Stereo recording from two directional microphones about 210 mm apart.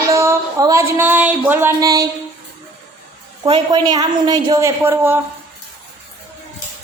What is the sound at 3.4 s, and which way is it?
A woman's voice, 20° right (ahead or behind).